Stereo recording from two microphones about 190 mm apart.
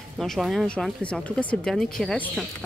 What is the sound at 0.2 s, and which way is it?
A woman's voice, centre (ahead or behind).